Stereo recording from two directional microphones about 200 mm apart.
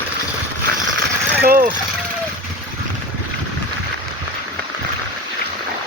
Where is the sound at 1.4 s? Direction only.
45° right (ahead or behind).